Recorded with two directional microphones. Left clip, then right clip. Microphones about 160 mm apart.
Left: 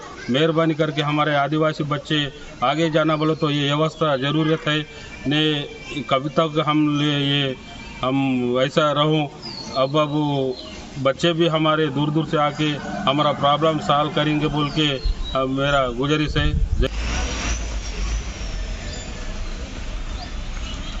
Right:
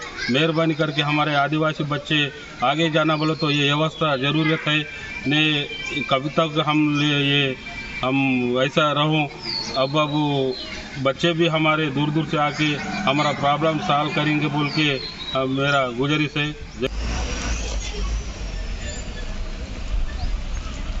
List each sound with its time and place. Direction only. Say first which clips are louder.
0.3 s a man's voice: left 2 dB; 15° left (ahead or behind)